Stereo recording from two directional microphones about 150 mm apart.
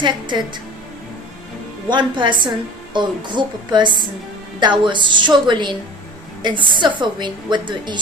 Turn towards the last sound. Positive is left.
turn(degrees=-30)  # may be behind; listen again after turning